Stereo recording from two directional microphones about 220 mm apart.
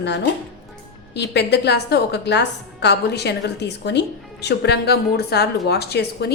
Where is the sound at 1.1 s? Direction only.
50° left (ahead or behind).